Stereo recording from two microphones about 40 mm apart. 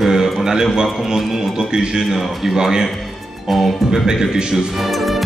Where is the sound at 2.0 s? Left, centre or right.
Centre.